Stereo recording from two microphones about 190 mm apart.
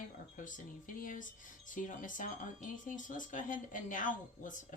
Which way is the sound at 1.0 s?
45° left (ahead or behind).